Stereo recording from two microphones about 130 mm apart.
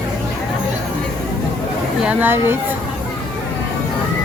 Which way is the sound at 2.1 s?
15° right (ahead or behind).